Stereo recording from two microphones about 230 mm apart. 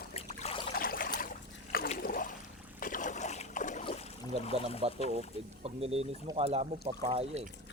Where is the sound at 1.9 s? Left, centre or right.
Left.